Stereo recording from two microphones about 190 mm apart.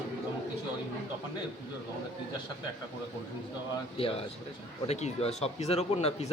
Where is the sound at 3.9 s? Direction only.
30° left (ahead or behind).